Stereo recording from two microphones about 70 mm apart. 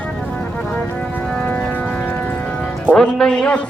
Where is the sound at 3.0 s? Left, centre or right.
Centre.